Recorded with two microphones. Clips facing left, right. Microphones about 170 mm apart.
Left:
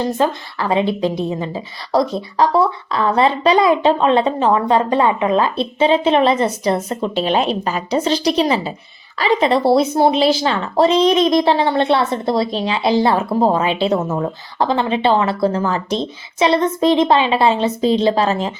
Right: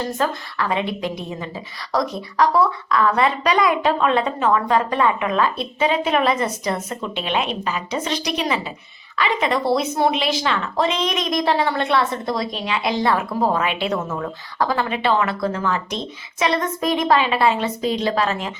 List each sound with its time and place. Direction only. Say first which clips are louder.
0.0 s speech: left 5 dB; 30° left (ahead or behind)